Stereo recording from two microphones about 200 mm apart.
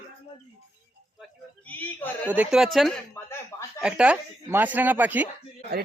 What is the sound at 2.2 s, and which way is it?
Speech, 5° right (ahead or behind).